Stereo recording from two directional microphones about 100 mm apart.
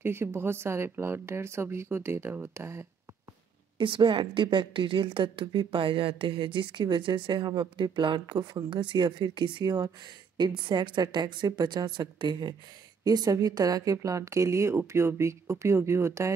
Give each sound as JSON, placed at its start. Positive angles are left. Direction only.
{"t": 0.0, "sound": "speech", "side_deg": -25}
{"t": 3.7, "sound": "a woman's voice", "side_deg": -60}